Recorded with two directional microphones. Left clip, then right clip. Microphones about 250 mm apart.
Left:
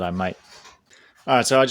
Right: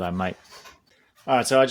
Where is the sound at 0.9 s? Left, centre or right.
Left.